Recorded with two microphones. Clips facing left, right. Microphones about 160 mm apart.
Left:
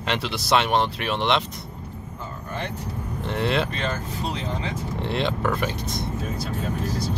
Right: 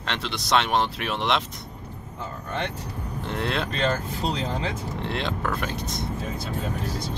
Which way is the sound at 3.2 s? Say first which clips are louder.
Left 4 dB; centre (ahead or behind).